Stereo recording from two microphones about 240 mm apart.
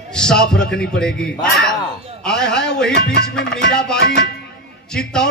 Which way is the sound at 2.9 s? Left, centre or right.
Left.